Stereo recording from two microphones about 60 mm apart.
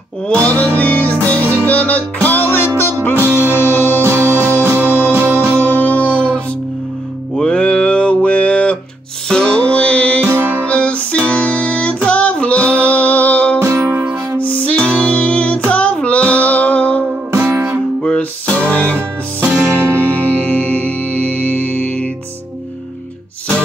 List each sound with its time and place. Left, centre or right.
0.4 s music: left
3.2 s music: right
3.4 s music: left
5.1 s music: right
5.7 s music: left
7.3 s mantra: centre
9.3 s music: centre
10.2 s music: right
10.6 s music: left
13.6 s music: right
14.4 s music: left
15.7 s child singing: left
17.3 s music: right
18.0 s music: centre